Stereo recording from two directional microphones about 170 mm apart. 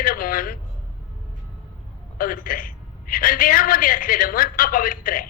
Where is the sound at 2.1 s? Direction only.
55° left (ahead or behind).